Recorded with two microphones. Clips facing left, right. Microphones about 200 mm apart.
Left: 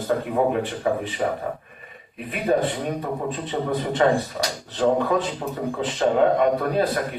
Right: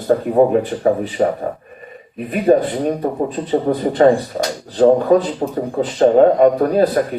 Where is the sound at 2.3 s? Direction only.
40° right (ahead or behind).